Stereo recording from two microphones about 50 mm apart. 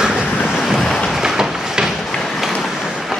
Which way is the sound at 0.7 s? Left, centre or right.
Centre.